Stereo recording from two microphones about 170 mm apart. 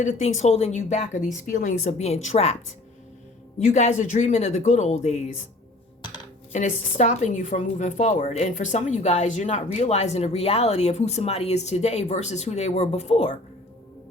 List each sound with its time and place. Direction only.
0.0 s a woman's voice: 40° left (ahead or behind)
3.6 s speech: 40° left (ahead or behind)
6.5 s a woman's voice: 45° left (ahead or behind)